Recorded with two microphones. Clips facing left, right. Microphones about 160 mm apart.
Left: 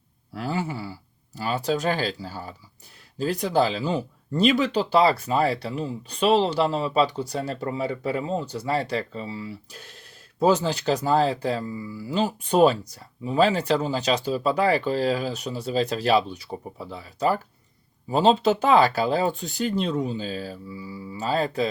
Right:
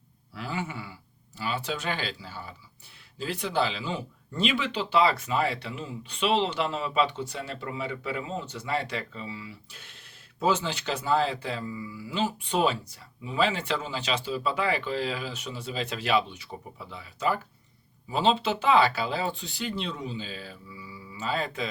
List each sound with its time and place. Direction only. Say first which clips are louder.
0.3 s speech: left 6 dB; 40° left (ahead or behind)